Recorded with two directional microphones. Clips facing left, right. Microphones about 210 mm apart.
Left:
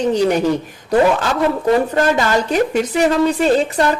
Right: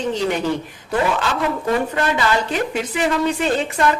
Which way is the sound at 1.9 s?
45° left (ahead or behind).